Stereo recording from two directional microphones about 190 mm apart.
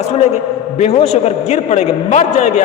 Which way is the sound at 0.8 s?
35° left (ahead or behind).